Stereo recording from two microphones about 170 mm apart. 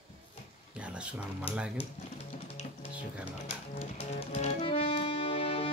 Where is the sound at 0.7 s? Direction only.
5° right (ahead or behind).